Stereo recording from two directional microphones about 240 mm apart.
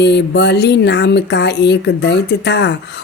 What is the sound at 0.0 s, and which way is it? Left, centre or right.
Speech, left.